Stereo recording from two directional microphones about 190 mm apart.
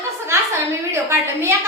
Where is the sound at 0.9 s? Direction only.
15° right (ahead or behind).